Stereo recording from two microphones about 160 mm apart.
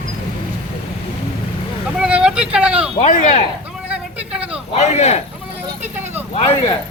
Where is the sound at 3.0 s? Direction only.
45° left (ahead or behind).